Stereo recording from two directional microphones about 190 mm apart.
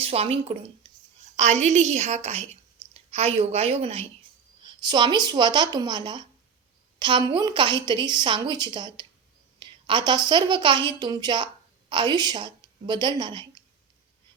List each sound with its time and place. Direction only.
0.0 s a woman's voice: 30° right (ahead or behind)